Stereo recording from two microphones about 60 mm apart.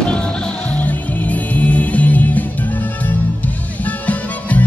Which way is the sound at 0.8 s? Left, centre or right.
Left.